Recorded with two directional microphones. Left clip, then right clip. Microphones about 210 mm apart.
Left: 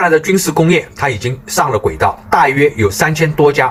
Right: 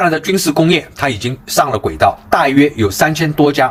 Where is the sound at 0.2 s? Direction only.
35° right (ahead or behind).